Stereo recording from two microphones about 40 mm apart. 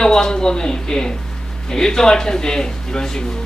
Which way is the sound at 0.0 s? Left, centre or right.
Centre.